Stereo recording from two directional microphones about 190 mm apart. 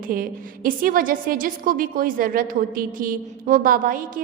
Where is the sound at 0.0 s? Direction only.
50° right (ahead or behind).